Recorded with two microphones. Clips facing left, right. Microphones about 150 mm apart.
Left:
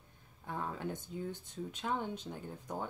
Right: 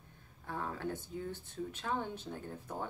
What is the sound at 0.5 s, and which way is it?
Speech, 15° left (ahead or behind).